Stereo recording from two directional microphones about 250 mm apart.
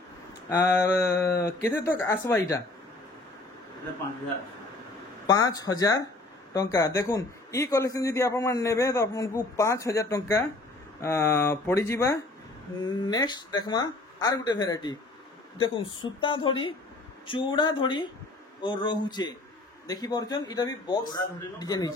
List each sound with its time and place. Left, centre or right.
0.6 s a man's voice: centre
5.2 s a man's voice: centre